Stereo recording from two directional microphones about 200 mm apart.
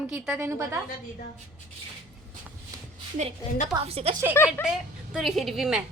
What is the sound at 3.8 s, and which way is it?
Speech, 30° right (ahead or behind).